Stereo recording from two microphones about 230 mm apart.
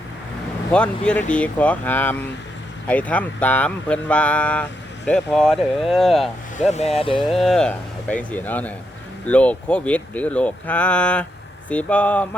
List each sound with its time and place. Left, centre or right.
0.7 s speech: centre
6.6 s speech: left
7.3 s speech: centre